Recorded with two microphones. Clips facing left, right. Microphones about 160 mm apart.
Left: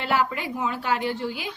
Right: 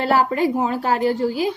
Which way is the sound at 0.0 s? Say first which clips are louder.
Right 7 dB; 40° right (ahead or behind).